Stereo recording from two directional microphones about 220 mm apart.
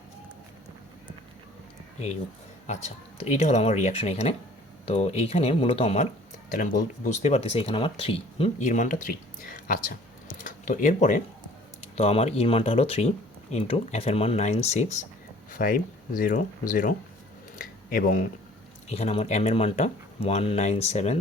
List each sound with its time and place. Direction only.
2.6 s speech: 30° left (ahead or behind)
17.6 s a sound: 40° left (ahead or behind)
18.9 s speech: 30° left (ahead or behind)